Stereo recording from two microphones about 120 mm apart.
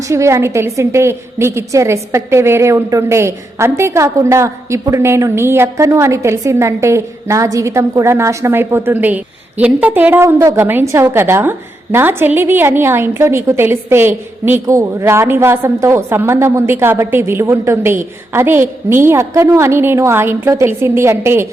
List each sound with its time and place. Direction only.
0.1 s a woman's voice: 25° right (ahead or behind)